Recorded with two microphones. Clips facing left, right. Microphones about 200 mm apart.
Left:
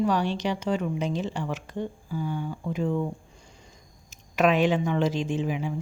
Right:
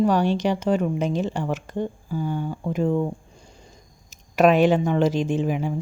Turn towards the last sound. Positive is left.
turn(degrees=-50)  # may be behind; listen again after turning